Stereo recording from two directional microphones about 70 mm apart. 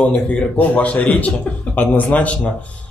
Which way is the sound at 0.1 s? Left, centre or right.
Centre.